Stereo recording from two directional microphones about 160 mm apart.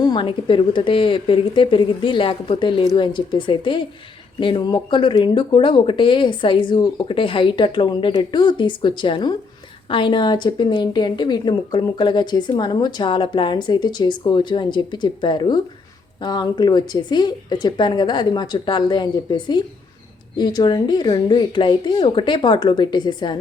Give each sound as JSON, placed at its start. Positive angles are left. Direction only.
{"t": 0.0, "sound": "speech", "side_deg": 30}